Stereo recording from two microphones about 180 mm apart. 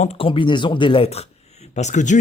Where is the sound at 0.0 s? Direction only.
35° left (ahead or behind).